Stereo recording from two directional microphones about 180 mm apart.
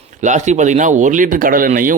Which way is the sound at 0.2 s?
40° right (ahead or behind).